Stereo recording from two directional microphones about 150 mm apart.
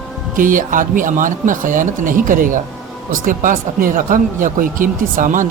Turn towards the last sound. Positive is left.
turn(degrees=-60)  # may be behind; listen again after turning